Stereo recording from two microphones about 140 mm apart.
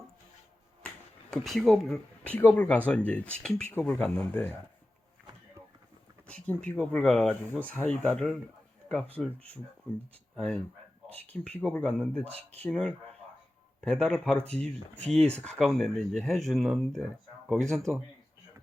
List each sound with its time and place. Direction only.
1.3 s speech: centre (ahead or behind)
6.7 s speech: 10° left (ahead or behind)
7.5 s speech: 15° right (ahead or behind)
7.8 s speech: 5° left (ahead or behind)
12.2 s speech: 50° right (ahead or behind)
12.6 s speech: 5° left (ahead or behind)